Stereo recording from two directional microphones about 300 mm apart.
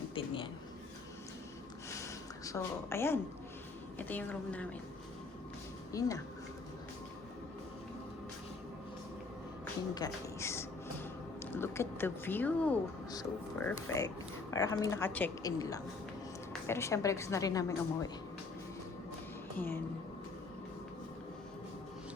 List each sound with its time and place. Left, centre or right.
0.1 s a sound: centre
2.0 s a sound: centre
3.9 s speech: centre
5.9 s a woman's voice: centre
9.9 s a woman's voice: centre
19.5 s a woman's voice: centre